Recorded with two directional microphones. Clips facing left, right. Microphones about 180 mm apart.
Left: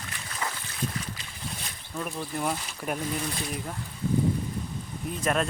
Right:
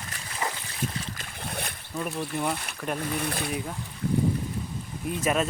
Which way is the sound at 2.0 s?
Centre (ahead or behind).